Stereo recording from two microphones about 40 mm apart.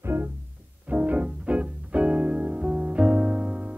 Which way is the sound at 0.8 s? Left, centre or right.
Right.